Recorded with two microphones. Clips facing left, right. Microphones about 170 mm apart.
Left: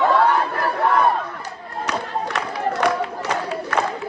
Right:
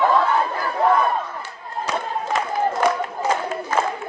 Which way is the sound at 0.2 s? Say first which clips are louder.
Left 2 dB; 65° left (ahead or behind).